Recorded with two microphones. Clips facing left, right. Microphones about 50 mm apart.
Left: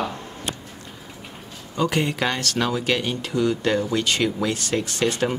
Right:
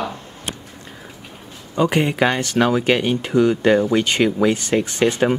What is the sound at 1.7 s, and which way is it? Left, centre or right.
Speech, right.